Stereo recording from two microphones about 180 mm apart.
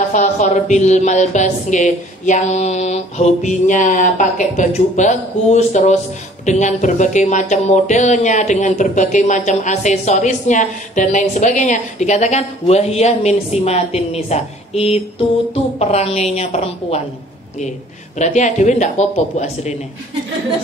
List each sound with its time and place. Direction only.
0.1 s a woman's voice: 40° left (ahead or behind)